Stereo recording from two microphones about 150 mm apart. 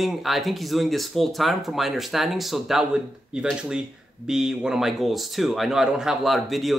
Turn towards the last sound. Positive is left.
turn(degrees=0)  # may be behind; listen again after turning